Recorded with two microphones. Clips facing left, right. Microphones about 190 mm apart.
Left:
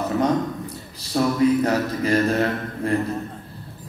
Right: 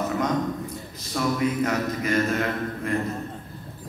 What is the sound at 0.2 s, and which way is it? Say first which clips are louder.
A man's voice: left 4 dB; 35° left (ahead or behind).